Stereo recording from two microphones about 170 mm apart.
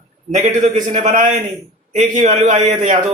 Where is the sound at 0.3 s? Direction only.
45° right (ahead or behind).